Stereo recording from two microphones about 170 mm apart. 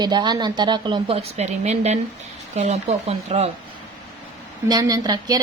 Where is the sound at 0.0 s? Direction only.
25° right (ahead or behind).